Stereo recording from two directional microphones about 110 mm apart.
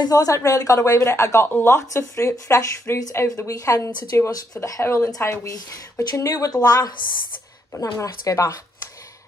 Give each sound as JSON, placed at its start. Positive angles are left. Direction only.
{"t": 0.0, "sound": "a woman's voice", "side_deg": 35}